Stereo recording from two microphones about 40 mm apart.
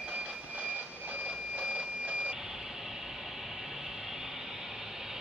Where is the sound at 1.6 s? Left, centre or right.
Right.